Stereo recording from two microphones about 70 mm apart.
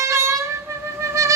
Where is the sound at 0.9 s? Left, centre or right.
Right.